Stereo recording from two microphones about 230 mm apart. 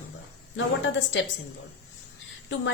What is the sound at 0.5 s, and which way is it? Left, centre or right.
Speech, left.